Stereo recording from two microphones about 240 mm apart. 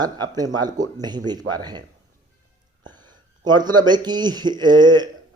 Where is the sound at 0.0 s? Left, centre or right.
Centre.